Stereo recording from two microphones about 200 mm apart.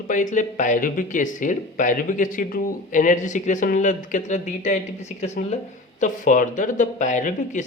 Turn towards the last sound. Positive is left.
turn(degrees=40)  # may be behind; listen again after turning